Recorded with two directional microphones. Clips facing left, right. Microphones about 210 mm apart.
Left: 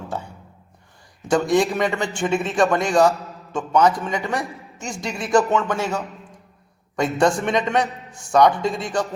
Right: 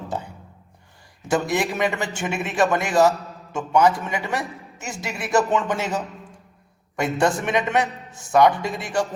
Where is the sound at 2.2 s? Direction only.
15° right (ahead or behind).